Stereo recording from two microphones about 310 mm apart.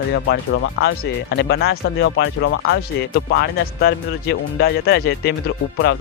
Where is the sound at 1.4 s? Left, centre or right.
Left.